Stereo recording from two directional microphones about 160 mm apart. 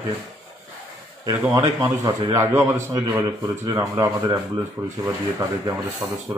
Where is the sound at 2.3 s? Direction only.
20° right (ahead or behind).